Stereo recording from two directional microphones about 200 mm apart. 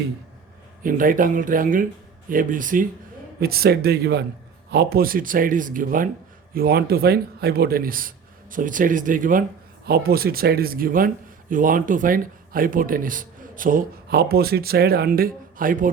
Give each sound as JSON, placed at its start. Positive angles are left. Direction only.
{"t": 0.8, "sound": "speech", "side_deg": -45}